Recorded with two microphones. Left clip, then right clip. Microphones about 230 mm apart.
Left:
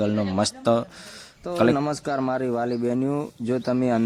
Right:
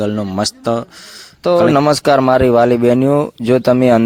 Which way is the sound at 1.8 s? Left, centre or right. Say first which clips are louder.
Right 15 dB; right.